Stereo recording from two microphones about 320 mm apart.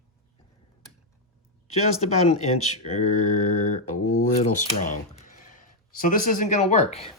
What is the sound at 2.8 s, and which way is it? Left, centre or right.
Speech, left.